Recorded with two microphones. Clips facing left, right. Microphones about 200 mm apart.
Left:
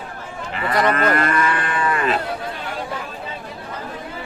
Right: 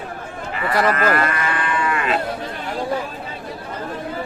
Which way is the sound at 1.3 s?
45° left (ahead or behind).